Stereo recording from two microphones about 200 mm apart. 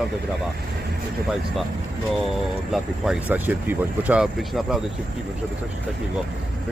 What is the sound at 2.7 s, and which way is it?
Speech, 5° right (ahead or behind).